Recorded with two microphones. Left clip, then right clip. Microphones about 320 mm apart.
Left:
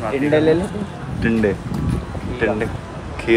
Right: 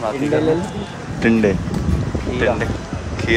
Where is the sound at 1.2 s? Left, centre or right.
Centre.